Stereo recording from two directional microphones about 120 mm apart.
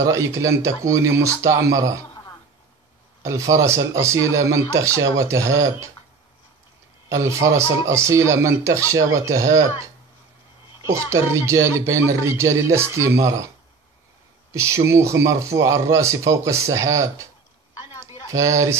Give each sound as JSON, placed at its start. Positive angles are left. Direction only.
{"t": 0.0, "sound": "speech", "side_deg": -25}
{"t": 3.2, "sound": "speech", "side_deg": -25}
{"t": 7.1, "sound": "speech", "side_deg": -25}
{"t": 10.9, "sound": "speech", "side_deg": -25}
{"t": 14.5, "sound": "speech", "side_deg": -25}